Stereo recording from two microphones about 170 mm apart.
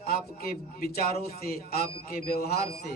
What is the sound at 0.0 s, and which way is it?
A man's voice, 60° left (ahead or behind).